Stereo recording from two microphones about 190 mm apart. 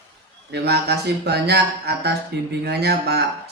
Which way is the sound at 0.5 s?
60° right (ahead or behind).